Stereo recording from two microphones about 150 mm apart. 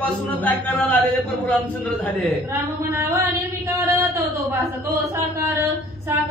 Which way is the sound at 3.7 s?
20° right (ahead or behind).